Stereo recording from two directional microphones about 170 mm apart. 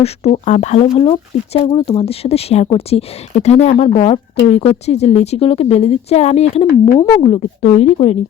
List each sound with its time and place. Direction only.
0.0 s speech: 40° left (ahead or behind)